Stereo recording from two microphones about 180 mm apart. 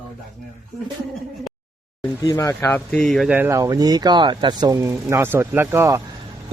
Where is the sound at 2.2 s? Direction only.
15° left (ahead or behind); by 3.3 s centre (ahead or behind).